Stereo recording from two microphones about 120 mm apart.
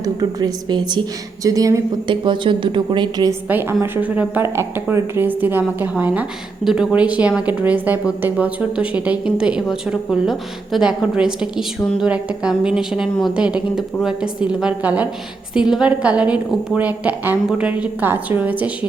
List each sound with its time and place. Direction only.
0.0 s a woman's voice: 30° right (ahead or behind)
2.0 s a woman's voice: 40° right (ahead or behind)
3.5 s speech: 20° right (ahead or behind)